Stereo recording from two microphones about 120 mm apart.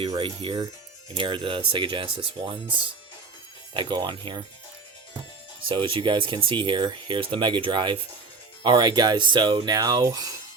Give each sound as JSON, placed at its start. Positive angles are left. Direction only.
{"t": 0.2, "sound": "speech", "side_deg": -50}
{"t": 3.8, "sound": "speech", "side_deg": -40}
{"t": 5.6, "sound": "speech", "side_deg": -45}